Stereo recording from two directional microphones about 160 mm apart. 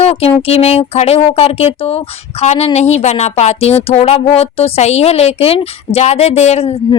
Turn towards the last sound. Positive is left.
turn(degrees=40)  # may be behind; listen again after turning